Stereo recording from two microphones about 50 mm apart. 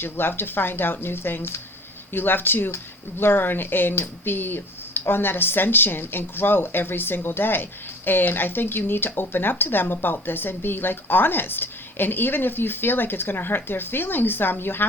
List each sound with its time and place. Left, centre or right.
0.0 s speech: left